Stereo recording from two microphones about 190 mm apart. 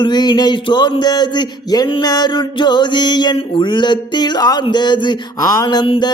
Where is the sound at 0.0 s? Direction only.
25° left (ahead or behind).